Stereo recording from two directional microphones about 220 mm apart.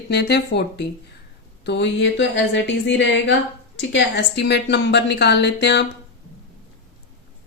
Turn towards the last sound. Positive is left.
turn(degrees=50)  # may be behind; listen again after turning